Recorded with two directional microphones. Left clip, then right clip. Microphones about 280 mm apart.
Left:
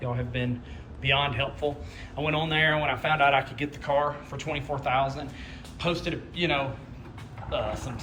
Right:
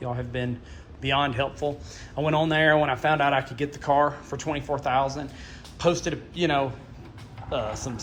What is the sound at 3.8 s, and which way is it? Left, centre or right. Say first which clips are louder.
Speech: right 4 dB; right.